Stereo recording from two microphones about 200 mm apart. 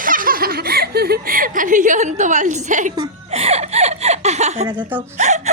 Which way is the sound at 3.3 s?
30° right (ahead or behind).